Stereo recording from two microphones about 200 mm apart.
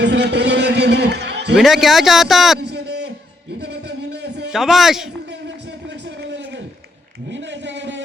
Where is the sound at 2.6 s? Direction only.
55° right (ahead or behind).